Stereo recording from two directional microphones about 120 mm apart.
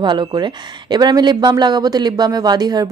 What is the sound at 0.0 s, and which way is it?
Speech, 40° right (ahead or behind).